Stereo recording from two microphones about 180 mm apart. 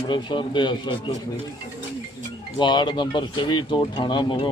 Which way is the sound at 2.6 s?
25° left (ahead or behind).